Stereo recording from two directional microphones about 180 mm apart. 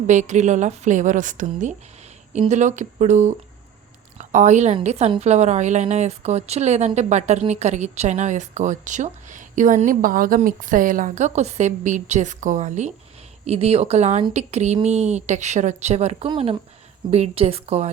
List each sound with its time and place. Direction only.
0.1 s a woman's voice: 40° right (ahead or behind)